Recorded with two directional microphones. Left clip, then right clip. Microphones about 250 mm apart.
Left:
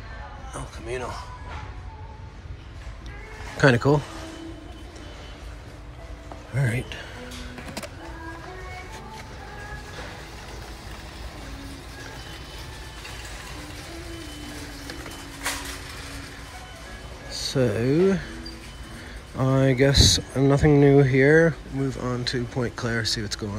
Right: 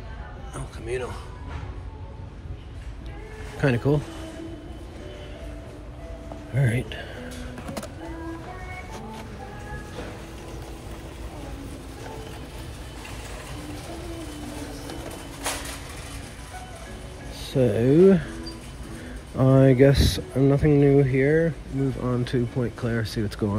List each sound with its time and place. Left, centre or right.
0.8 s speech: centre
3.5 s speech: centre
6.5 s speech: centre
17.5 s speech: centre
19.3 s speech: centre